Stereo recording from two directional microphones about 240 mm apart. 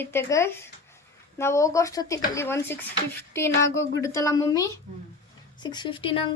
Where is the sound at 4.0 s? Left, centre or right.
Centre.